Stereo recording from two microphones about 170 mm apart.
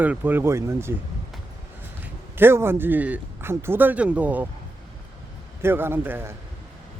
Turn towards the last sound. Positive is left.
turn(degrees=-15)  # may be behind; listen again after turning